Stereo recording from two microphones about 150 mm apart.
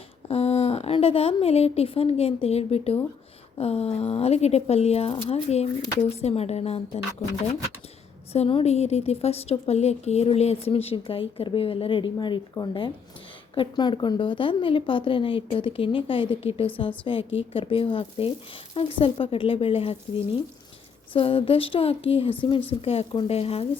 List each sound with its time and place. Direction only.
0.3 s a woman's voice: 40° left (ahead or behind)
8.3 s a woman's voice: 40° left (ahead or behind)